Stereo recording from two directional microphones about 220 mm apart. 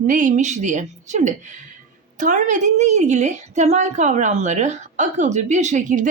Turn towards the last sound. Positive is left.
turn(degrees=-35)  # may be behind; listen again after turning